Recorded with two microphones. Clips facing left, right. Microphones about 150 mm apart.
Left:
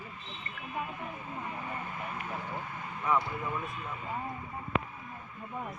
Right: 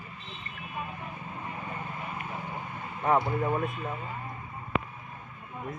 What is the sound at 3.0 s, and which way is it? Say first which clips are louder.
Speech: right 5 dB; 55° right (ahead or behind).